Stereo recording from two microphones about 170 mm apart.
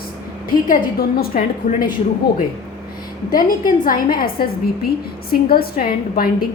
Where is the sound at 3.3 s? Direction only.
50° left (ahead or behind).